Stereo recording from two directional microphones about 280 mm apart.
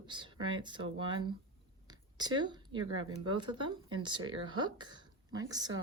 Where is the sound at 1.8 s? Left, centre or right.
Centre.